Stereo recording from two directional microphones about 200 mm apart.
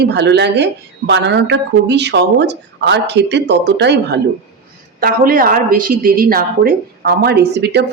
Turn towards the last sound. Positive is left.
turn(degrees=-55)  # may be behind; listen again after turning